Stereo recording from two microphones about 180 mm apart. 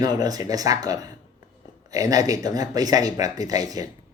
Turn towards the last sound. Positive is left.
turn(degrees=-20)  # may be behind; listen again after turning